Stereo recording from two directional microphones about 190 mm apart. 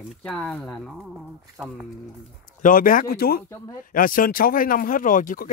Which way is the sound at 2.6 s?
45° left (ahead or behind).